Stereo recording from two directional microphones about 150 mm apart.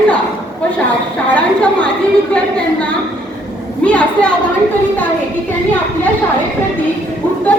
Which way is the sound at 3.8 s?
10° left (ahead or behind).